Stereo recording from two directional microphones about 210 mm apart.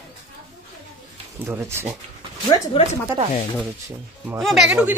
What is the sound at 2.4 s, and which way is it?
Speech, 30° left (ahead or behind).